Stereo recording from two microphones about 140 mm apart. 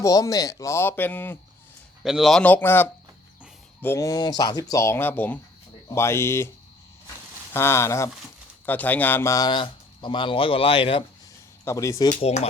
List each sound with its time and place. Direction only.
0.0 s speech: 25° left (ahead or behind)
2.0 s a man's voice: centre (ahead or behind)
2.4 s speech: 10° left (ahead or behind)
7.5 s speech: 20° left (ahead or behind); by 11.0 s 40° left (ahead or behind)
11.6 s speech: 20° left (ahead or behind)
12.0 s speech: 50° left (ahead or behind)